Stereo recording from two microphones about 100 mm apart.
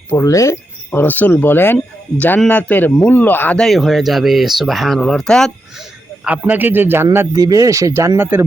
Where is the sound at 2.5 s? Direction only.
15° left (ahead or behind).